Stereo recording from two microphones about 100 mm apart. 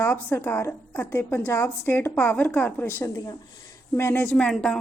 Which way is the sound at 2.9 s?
35° left (ahead or behind).